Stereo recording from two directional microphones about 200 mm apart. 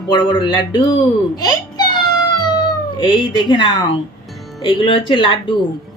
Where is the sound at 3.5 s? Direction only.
20° left (ahead or behind).